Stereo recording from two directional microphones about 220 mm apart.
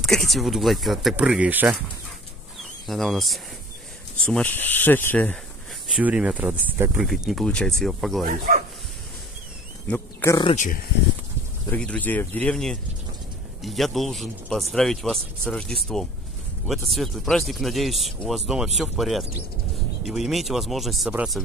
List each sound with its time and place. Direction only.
0.0 s speech: centre (ahead or behind)
2.9 s speech: centre (ahead or behind)
5.9 s speech: 5° right (ahead or behind)
8.3 s speech: 35° right (ahead or behind)
9.8 s speech: 5° left (ahead or behind)
10.5 s speech: 35° left (ahead or behind)
11.7 s speech: 5° left (ahead or behind)